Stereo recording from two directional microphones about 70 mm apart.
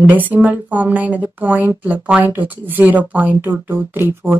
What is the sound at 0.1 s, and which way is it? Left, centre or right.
Speech, right.